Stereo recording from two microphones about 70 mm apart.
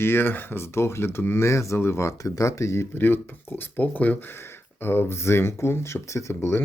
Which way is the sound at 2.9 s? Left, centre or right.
Left.